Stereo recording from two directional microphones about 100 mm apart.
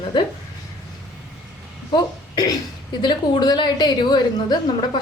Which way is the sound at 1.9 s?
40° left (ahead or behind).